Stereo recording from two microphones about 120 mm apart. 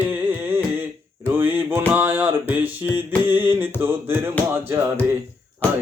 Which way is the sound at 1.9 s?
15° right (ahead or behind).